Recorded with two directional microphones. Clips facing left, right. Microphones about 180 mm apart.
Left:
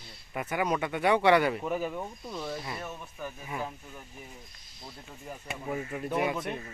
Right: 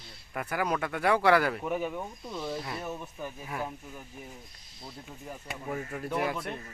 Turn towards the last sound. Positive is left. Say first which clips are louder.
# left 2 dB
turn(degrees=5)  # may be behind; listen again after turning